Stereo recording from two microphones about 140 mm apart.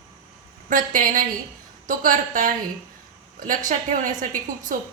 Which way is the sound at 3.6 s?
65° right (ahead or behind).